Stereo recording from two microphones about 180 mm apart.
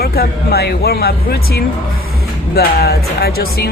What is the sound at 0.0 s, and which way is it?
Music, 60° left (ahead or behind).